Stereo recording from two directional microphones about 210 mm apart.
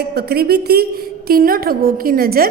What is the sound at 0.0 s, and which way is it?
A woman's voice, 50° right (ahead or behind).